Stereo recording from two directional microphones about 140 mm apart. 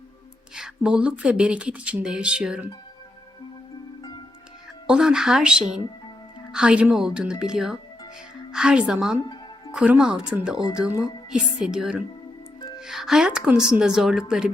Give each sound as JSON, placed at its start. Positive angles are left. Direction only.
{"t": 0.5, "sound": "speech", "side_deg": -5}
{"t": 4.9, "sound": "speech", "side_deg": -5}
{"t": 9.2, "sound": "music", "side_deg": 30}
{"t": 9.7, "sound": "speech", "side_deg": -10}
{"t": 10.8, "sound": "speech", "side_deg": 25}
{"t": 11.3, "sound": "speech", "side_deg": -5}